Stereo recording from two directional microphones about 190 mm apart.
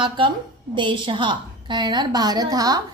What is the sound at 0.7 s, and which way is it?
A woman's voice, 25° right (ahead or behind).